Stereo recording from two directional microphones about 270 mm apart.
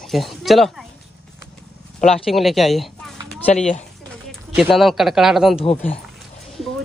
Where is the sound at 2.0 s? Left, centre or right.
Left.